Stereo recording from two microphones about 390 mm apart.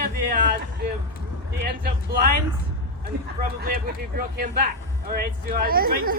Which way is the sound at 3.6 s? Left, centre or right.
Right.